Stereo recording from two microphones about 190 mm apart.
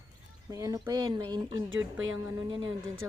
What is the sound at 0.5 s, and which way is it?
Speech, 20° right (ahead or behind).